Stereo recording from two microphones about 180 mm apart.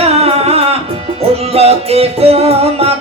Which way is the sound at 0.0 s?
35° right (ahead or behind).